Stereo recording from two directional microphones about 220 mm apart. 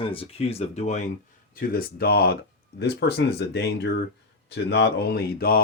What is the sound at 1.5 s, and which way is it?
Speech, 45° left (ahead or behind).